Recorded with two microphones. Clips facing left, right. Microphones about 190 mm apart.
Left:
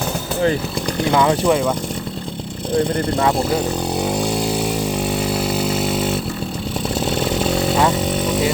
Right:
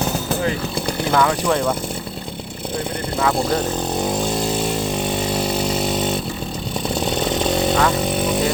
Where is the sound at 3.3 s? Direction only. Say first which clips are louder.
Left 1 dB; 10° left (ahead or behind).